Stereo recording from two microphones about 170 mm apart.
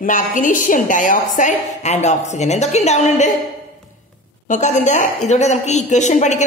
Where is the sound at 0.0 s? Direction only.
50° left (ahead or behind).